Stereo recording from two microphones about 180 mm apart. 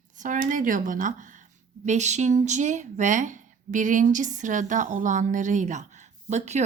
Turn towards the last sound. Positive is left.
turn(degrees=-40)  # may be behind; listen again after turning